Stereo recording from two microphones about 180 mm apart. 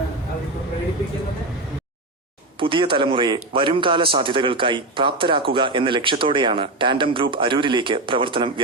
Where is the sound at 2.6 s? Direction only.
30° right (ahead or behind).